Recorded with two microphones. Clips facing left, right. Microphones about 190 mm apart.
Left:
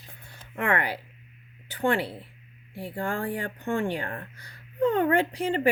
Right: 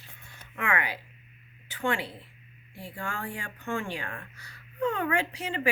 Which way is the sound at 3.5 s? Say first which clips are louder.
Left 3 dB; 35° left (ahead or behind).